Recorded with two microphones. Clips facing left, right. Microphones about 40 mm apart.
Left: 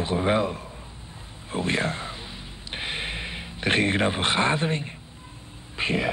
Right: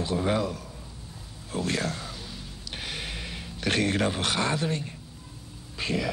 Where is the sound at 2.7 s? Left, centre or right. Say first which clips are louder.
Left 5 dB; left.